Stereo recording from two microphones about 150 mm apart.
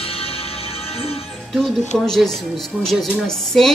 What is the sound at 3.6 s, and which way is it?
Speech, centre (ahead or behind).